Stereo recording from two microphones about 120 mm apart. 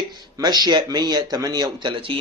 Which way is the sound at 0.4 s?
35° right (ahead or behind).